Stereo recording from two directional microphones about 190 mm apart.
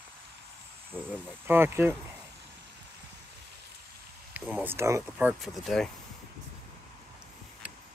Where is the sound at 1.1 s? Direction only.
10° right (ahead or behind).